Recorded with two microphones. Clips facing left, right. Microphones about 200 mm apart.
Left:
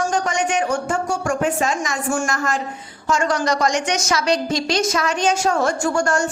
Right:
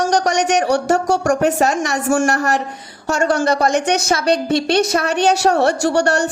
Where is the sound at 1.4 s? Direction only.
65° right (ahead or behind).